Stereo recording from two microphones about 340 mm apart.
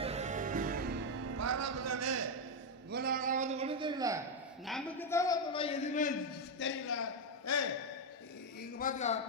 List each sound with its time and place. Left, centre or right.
0.0 s music: centre
1.1 s music: right
2.9 s a sound: right; by 4.2 s centre
4.6 s a man's voice: centre; by 6.1 s left
6.6 s a man's voice: left
8.8 s a man's voice: left